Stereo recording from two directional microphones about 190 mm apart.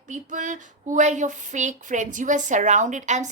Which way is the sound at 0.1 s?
40° right (ahead or behind).